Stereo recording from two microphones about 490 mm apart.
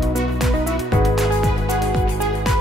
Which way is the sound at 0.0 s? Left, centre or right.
Centre.